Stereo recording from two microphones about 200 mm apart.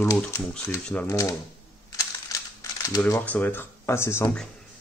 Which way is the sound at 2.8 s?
15° left (ahead or behind).